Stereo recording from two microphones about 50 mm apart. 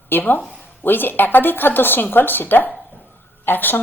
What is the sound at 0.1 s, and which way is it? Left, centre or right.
Speech, left.